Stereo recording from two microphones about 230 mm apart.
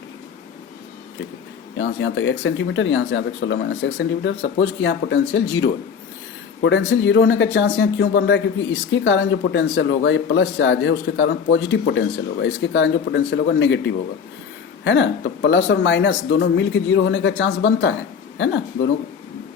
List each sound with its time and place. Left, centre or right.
1.8 s speech: left